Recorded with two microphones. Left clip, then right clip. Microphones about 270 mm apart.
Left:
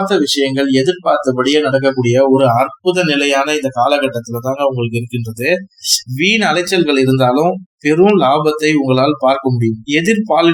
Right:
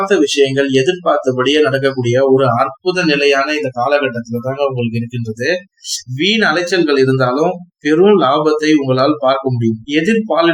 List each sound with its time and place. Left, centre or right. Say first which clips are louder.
0.0 s speech: right 2 dB; centre
0.3 s speech: right 2 dB; left